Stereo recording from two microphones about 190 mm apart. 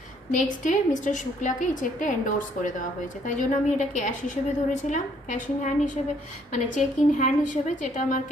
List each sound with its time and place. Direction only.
0.3 s a woman's voice: 40° left (ahead or behind)